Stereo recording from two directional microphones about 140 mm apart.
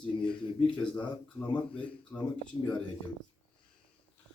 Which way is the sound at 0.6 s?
10° left (ahead or behind).